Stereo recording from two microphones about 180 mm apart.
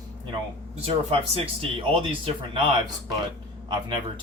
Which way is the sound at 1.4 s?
30° right (ahead or behind).